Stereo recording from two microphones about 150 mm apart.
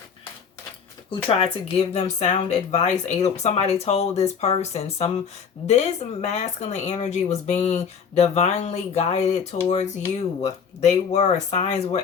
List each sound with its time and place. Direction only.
1.3 s speech: 40° left (ahead or behind)